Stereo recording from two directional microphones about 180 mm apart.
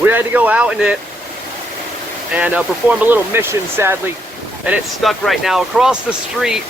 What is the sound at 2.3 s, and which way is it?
Speech, 5° right (ahead or behind).